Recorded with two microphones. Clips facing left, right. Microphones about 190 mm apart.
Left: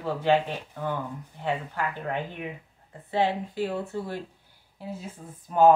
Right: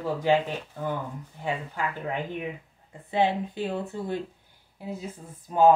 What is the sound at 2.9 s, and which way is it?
Speech, 20° right (ahead or behind).